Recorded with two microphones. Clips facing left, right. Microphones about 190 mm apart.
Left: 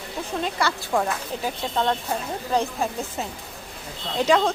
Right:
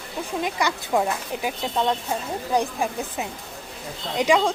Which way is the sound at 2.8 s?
15° right (ahead or behind).